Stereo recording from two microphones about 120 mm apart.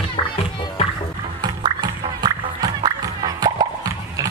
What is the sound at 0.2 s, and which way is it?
Music, 50° left (ahead or behind).